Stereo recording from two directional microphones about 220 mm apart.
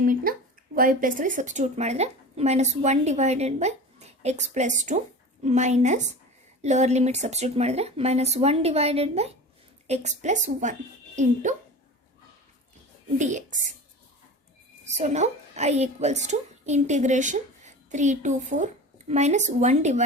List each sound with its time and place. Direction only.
0.0 s a woman's voice: 40° right (ahead or behind)
13.1 s a woman's voice: 35° right (ahead or behind)
14.8 s a woman's voice: 30° right (ahead or behind)